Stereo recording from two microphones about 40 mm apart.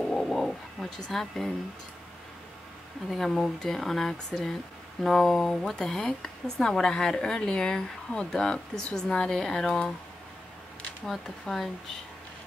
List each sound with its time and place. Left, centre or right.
0.0 s bird: centre
0.3 s a sound: centre
3.2 s speech: centre
11.4 s speech: centre